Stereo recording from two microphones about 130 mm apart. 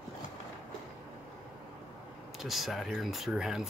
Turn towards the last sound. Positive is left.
turn(degrees=-5)  # may be behind; listen again after turning